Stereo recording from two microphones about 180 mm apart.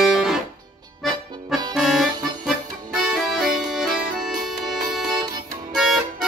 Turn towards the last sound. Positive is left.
turn(degrees=-5)  # may be behind; listen again after turning